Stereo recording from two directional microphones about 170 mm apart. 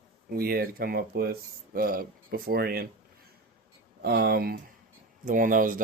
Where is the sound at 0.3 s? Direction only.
60° right (ahead or behind).